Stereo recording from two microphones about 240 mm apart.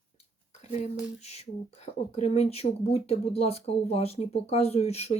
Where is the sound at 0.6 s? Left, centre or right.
Left.